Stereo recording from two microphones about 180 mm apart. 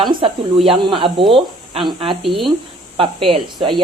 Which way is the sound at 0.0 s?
25° right (ahead or behind).